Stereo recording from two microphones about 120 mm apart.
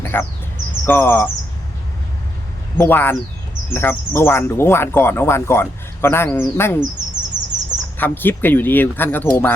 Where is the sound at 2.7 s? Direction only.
20° left (ahead or behind).